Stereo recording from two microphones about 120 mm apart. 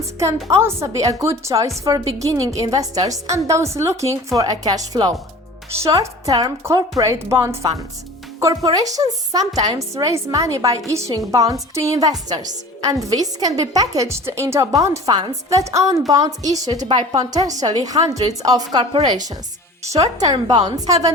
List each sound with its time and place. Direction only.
0.4 s a woman's voice: 25° right (ahead or behind)
19.9 s a woman's voice: 30° right (ahead or behind)